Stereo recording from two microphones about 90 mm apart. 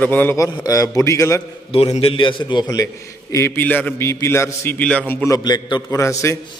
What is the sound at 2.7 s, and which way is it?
Speech, 40° left (ahead or behind).